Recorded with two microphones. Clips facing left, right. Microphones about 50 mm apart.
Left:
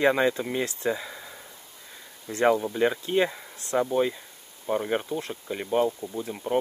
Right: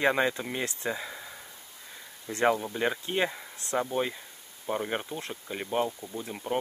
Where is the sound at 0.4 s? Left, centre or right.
Centre.